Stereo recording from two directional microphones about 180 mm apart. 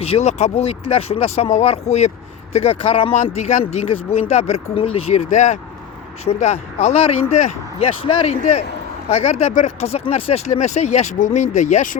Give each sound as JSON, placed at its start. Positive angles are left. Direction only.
{"t": 0.0, "sound": "speech", "side_deg": 35}